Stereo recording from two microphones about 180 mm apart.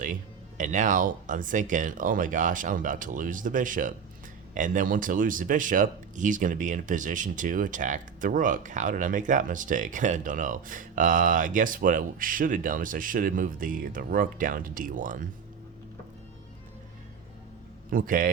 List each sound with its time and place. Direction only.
0.0 s speech: 45° right (ahead or behind)
17.9 s speech: 50° right (ahead or behind)